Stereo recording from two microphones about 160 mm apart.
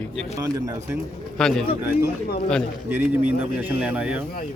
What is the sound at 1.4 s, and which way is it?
Speech, 5° left (ahead or behind).